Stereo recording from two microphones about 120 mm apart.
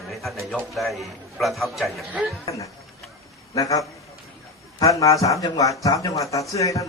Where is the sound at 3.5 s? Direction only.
30° left (ahead or behind).